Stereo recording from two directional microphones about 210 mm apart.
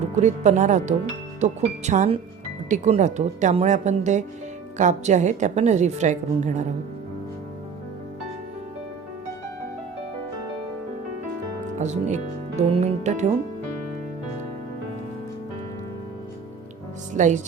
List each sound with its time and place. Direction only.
0.2 s a woman's voice: 35° right (ahead or behind)
11.8 s a woman's voice: 35° right (ahead or behind)
17.2 s a woman's voice: 35° right (ahead or behind)